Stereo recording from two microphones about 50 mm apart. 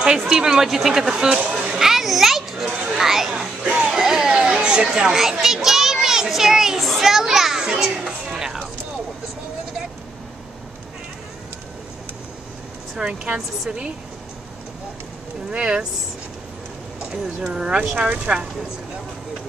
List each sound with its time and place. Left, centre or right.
0.0 s speech: centre
3.0 s children playing: centre
13.0 s speech: right
15.5 s speech: centre
17.1 s speech: centre